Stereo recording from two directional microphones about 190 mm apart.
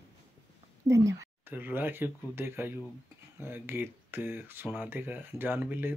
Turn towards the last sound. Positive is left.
turn(degrees=-10)  # may be behind; listen again after turning